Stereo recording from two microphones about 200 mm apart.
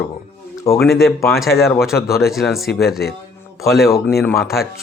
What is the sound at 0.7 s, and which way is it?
Speech, 15° left (ahead or behind).